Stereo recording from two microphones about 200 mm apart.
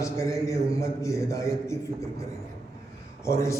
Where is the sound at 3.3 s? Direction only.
15° left (ahead or behind).